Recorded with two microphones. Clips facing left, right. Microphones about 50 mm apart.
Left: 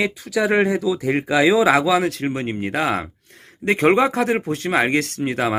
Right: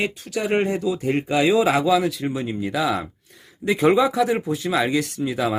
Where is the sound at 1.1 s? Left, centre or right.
Left.